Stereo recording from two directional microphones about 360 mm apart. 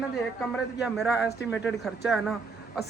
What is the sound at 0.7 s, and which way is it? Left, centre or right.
Speech, centre.